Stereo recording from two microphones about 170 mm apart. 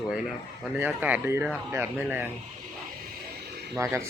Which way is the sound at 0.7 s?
10° right (ahead or behind).